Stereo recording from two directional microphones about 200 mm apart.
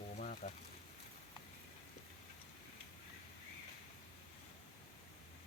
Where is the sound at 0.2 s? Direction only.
35° left (ahead or behind).